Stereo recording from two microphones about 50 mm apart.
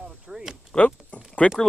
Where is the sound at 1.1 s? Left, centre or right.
Left.